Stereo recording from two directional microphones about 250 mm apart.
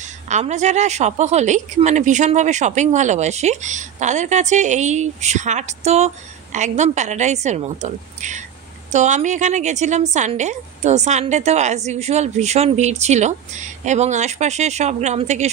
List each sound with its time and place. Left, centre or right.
0.0 s a woman's voice: right